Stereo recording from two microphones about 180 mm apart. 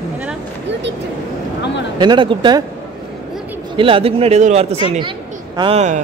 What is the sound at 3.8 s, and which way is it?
Speech, 30° right (ahead or behind).